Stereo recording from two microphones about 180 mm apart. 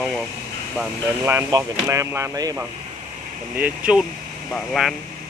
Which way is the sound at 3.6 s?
5° right (ahead or behind).